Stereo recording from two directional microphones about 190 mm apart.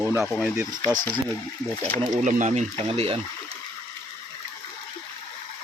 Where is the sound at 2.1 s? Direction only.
40° right (ahead or behind).